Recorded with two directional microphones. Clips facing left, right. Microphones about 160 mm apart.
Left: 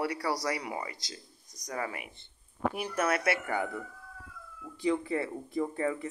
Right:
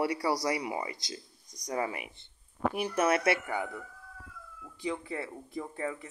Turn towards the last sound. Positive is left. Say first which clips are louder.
# left 5 dB
turn(degrees=-5)  # may be behind; listen again after turning